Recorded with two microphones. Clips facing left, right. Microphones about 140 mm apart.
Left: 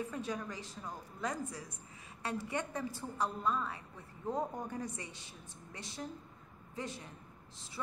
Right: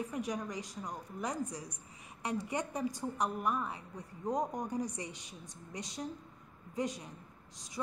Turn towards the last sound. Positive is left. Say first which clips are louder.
# right 6 dB
turn(degrees=-15)  # may be behind; listen again after turning